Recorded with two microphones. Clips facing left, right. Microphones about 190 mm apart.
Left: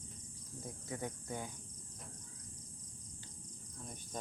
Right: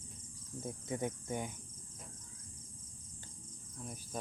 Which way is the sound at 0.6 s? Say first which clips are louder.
Right 5 dB; 20° right (ahead or behind).